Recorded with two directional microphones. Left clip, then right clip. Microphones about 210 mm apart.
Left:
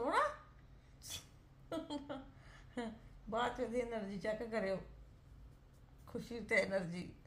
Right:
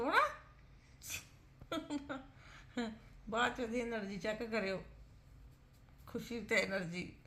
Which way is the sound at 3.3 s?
15° right (ahead or behind).